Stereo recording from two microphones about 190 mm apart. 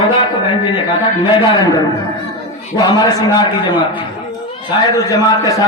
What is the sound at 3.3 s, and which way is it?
Speech, 25° left (ahead or behind).